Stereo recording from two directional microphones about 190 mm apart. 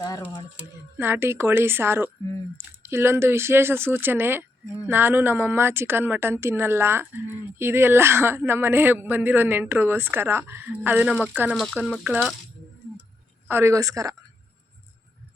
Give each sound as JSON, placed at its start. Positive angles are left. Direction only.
{"t": 0.0, "sound": "a sound", "side_deg": 20}
{"t": 0.9, "sound": "speech", "side_deg": -10}
{"t": 11.9, "sound": "speech", "side_deg": -5}
{"t": 13.5, "sound": "speech", "side_deg": -15}